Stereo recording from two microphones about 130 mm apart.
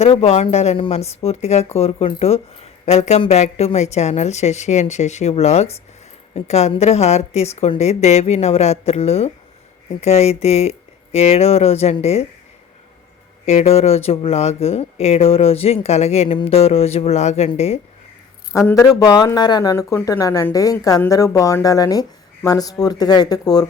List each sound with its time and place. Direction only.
0.0 s speech: 50° left (ahead or behind)
13.4 s speech: 60° left (ahead or behind)
18.7 s speech: 25° left (ahead or behind)